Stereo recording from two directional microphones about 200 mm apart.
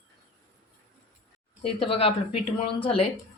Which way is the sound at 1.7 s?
30° left (ahead or behind).